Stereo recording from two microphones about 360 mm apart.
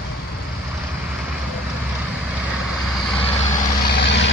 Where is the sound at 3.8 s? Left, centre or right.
Left.